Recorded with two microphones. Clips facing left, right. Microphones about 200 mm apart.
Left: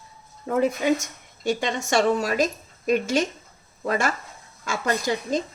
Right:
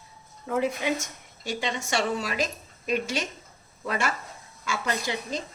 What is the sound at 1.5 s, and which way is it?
A woman's voice, 45° left (ahead or behind).